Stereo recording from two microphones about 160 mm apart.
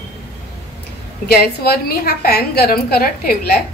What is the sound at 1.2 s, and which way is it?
A woman's voice, 75° left (ahead or behind).